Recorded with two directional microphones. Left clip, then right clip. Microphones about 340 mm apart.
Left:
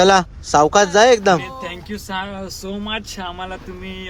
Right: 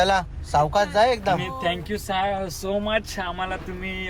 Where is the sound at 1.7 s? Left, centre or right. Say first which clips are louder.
Right 2 dB; centre.